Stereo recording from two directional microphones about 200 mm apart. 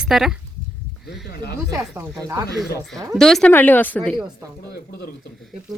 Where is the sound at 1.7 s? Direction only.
15° right (ahead or behind).